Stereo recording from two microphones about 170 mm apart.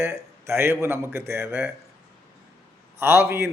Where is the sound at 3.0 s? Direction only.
15° right (ahead or behind).